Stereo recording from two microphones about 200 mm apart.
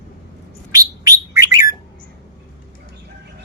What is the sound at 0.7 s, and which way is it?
Bird, 15° right (ahead or behind).